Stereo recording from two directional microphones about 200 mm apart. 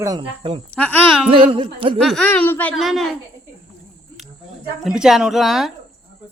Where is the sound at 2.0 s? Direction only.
5° left (ahead or behind).